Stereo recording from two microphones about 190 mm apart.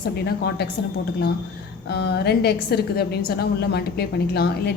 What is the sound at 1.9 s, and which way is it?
A woman's voice, 60° left (ahead or behind).